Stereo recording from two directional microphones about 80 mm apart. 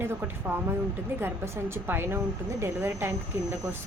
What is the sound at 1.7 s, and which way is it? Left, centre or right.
Speech, right.